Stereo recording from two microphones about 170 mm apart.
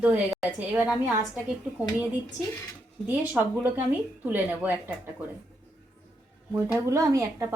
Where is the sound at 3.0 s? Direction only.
10° right (ahead or behind).